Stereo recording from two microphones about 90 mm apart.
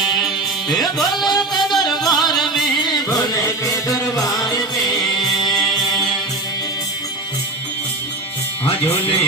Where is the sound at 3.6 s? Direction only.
40° left (ahead or behind).